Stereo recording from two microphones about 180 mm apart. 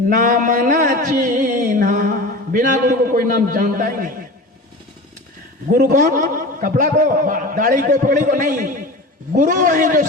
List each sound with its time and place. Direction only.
0.1 s a sound: 45° right (ahead or behind)
2.8 s a man's voice: 50° right (ahead or behind)
5.7 s a man's voice: 45° right (ahead or behind)